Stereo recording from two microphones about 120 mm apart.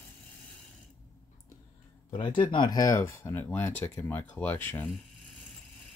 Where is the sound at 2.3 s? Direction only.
40° left (ahead or behind); by 4.9 s 20° left (ahead or behind).